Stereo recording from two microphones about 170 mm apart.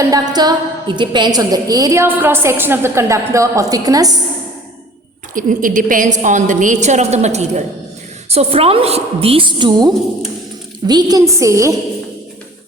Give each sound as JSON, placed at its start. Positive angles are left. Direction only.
{"t": 0.0, "sound": "a woman's voice", "side_deg": -25}
{"t": 5.3, "sound": "a woman's voice", "side_deg": -50}